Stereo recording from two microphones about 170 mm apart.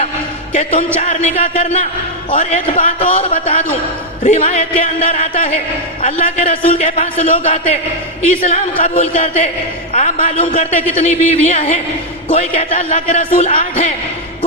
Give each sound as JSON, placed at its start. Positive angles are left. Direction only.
{"t": 0.5, "sound": "speech", "side_deg": 40}